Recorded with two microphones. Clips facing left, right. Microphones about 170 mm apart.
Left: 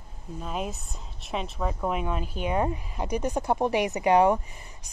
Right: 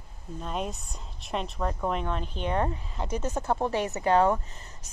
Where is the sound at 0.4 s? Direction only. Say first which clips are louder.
Even; 5° left (ahead or behind).